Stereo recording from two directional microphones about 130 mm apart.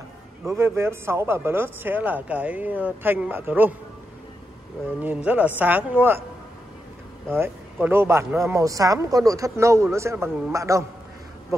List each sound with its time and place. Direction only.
0.5 s speech: 20° right (ahead or behind)
5.0 s speech: 15° right (ahead or behind)
7.2 s speech: 15° right (ahead or behind)